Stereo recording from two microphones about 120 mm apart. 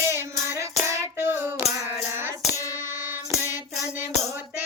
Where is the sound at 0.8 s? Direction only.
20° right (ahead or behind).